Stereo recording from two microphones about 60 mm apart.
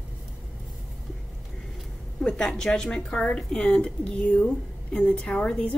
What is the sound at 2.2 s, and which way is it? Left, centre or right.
A woman's voice, centre.